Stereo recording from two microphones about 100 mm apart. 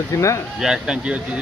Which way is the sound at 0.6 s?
5° right (ahead or behind).